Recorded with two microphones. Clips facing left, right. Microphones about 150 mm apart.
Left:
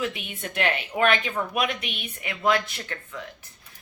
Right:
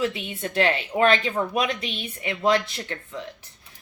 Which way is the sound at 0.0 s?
25° right (ahead or behind).